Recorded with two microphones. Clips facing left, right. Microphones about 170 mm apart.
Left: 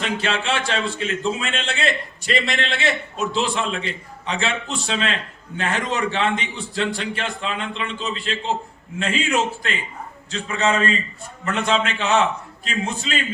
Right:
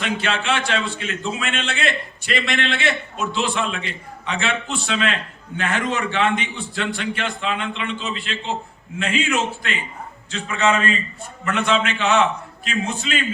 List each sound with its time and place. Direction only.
0.0 s a man's voice: 35° left (ahead or behind)